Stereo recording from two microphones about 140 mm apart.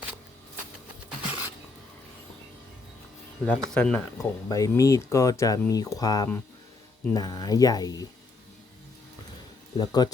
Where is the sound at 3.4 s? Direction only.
5° left (ahead or behind).